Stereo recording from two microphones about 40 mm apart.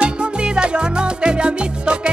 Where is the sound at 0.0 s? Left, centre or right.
Right.